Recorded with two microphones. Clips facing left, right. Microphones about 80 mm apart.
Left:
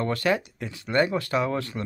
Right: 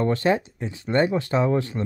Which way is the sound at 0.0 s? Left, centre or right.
Right.